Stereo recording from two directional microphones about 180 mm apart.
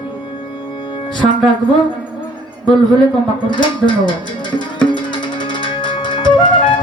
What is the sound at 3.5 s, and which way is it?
Speech, 25° left (ahead or behind).